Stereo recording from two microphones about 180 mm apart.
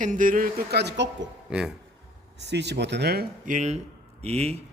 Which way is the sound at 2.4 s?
70° right (ahead or behind).